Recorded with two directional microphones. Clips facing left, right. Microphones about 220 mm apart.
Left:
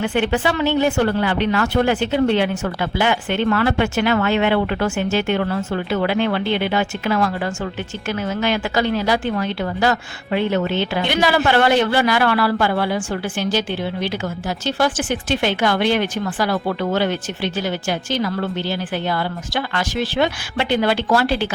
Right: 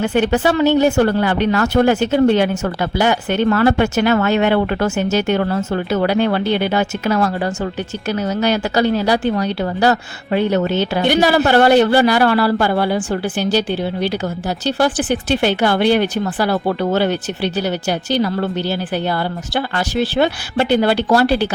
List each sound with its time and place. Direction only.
0.0 s a woman's voice: 40° right (ahead or behind)